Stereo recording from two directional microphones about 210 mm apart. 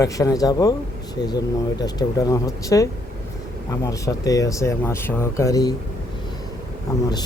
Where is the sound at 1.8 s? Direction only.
20° left (ahead or behind).